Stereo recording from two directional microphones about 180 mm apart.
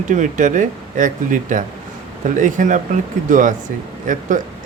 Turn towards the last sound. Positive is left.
turn(degrees=-45)  # may be behind; listen again after turning